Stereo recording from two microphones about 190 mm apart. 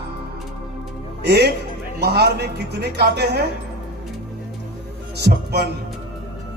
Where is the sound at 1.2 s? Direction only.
60° right (ahead or behind).